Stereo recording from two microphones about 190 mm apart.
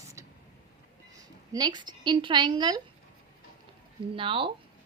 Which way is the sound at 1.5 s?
20° right (ahead or behind).